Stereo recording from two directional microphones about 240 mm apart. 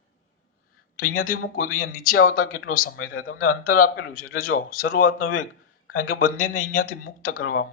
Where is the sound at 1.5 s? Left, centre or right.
Left.